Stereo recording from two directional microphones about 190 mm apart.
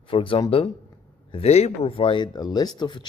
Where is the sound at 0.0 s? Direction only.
30° left (ahead or behind).